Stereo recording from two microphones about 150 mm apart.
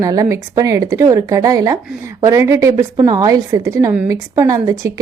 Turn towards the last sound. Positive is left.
turn(degrees=-20)  # may be behind; listen again after turning